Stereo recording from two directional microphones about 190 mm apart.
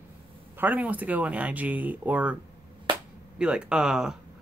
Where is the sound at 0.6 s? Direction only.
10° right (ahead or behind).